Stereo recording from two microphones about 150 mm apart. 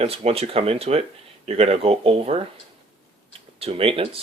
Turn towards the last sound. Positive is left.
turn(degrees=-40)  # may be behind; listen again after turning